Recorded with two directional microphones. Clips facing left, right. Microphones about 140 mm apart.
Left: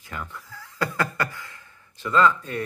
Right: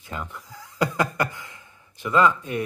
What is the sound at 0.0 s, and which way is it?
Beatboxing, 20° right (ahead or behind).